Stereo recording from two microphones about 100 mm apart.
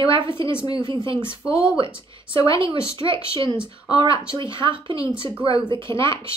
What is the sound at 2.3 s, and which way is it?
Speech, 60° right (ahead or behind).